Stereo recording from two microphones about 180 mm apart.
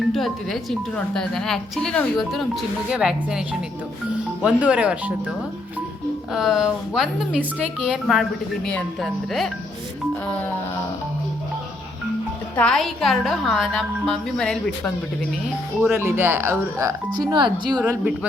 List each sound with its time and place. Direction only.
0.1 s a woman's voice: centre (ahead or behind)
4.4 s a woman's voice: 5° right (ahead or behind)
6.3 s a woman's voice: centre (ahead or behind)
10.2 s music: 10° left (ahead or behind)
12.5 s a woman's voice: 5° left (ahead or behind)
15.8 s speech: 15° right (ahead or behind)